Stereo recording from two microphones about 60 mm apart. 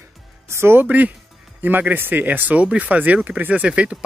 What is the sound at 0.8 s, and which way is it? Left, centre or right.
Speech, right.